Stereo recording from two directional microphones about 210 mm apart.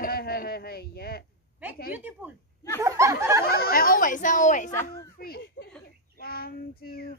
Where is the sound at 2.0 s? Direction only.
10° right (ahead or behind).